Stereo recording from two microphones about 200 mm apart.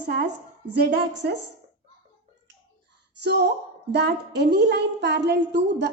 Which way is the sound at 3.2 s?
55° right (ahead or behind).